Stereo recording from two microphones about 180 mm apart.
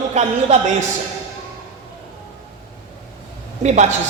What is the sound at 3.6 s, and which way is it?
Speech, 40° right (ahead or behind).